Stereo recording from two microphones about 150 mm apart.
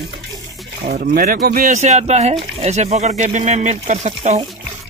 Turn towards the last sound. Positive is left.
turn(degrees=-50)  # may be behind; listen again after turning